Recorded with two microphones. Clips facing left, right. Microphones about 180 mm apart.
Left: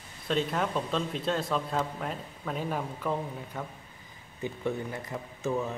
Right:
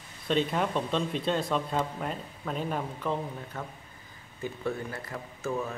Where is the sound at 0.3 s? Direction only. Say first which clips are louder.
Right 2 dB; centre (ahead or behind).